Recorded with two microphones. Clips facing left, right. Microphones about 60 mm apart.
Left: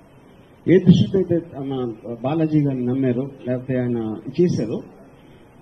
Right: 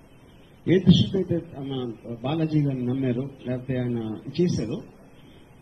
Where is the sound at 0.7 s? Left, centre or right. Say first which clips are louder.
Left 5 dB; left.